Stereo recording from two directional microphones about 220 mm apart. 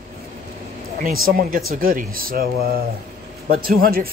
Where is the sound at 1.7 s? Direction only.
40° right (ahead or behind).